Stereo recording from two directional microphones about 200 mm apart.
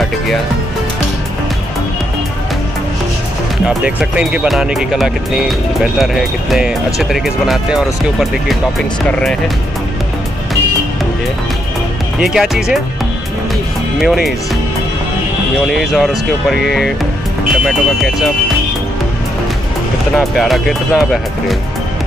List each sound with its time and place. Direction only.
3.6 s speech: 5° right (ahead or behind)
12.2 s speech: centre (ahead or behind)
13.9 s speech: centre (ahead or behind)
15.7 s speech: centre (ahead or behind)
20.2 s speech: centre (ahead or behind)